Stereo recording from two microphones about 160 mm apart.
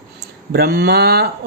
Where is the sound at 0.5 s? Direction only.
85° right.